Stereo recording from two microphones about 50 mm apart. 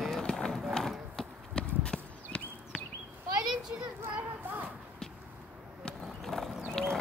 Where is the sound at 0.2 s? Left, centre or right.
Centre.